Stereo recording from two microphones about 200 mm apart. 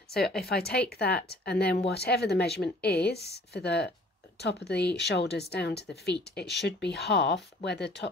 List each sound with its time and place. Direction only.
0.7 s speech: 50° left (ahead or behind)